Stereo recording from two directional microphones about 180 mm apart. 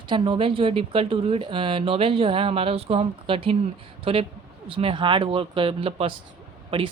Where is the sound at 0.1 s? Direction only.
30° right (ahead or behind).